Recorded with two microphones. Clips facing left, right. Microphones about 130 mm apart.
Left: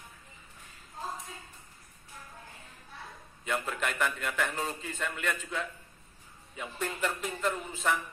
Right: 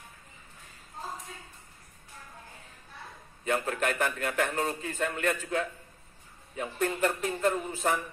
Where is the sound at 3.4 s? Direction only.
45° right (ahead or behind).